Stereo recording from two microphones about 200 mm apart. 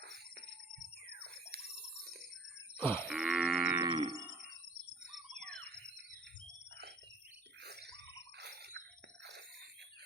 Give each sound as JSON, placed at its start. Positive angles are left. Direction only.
{"t": 0.0, "sound": "music", "side_deg": -55}
{"t": 1.2, "sound": "a sound", "side_deg": -50}
{"t": 2.8, "sound": "livestock", "side_deg": 10}
{"t": 3.1, "sound": "livestock", "side_deg": -5}
{"t": 3.8, "sound": "livestock", "side_deg": -20}
{"t": 7.6, "sound": "a sound", "side_deg": -55}